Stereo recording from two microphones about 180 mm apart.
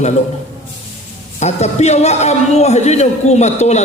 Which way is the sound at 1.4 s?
40° left (ahead or behind).